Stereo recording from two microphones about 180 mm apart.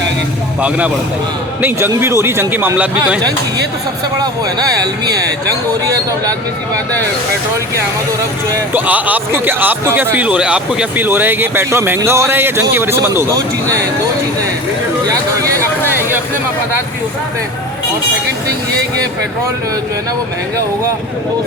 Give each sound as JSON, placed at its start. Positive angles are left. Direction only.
{"t": 1.6, "sound": "a man's voice", "side_deg": -15}
{"t": 4.2, "sound": "speech", "side_deg": -20}
{"t": 8.7, "sound": "a man's voice", "side_deg": -10}
{"t": 15.0, "sound": "speech", "side_deg": -15}